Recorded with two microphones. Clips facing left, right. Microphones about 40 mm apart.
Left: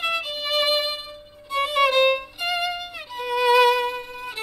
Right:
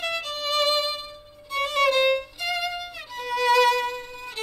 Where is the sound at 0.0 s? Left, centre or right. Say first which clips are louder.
Left 3 dB; centre.